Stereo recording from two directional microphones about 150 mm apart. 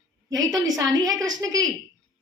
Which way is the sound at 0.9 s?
25° right (ahead or behind).